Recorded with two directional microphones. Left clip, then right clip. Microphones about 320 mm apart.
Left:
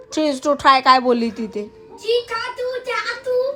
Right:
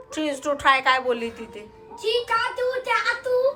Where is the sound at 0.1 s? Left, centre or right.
Centre.